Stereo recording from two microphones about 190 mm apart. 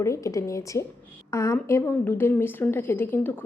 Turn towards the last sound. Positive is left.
turn(degrees=10)  # may be behind; listen again after turning